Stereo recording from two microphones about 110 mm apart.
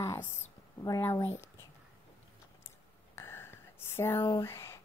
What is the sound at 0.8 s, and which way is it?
Speech, 30° left (ahead or behind).